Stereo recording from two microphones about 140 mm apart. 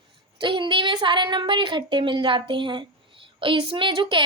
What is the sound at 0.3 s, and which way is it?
Speech, 35° right (ahead or behind).